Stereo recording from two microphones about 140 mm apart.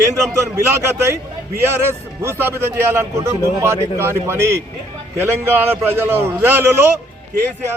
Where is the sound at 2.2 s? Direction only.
15° right (ahead or behind).